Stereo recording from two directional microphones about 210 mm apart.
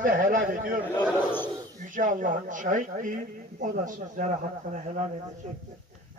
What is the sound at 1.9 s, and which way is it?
A woman's voice, 40° right (ahead or behind).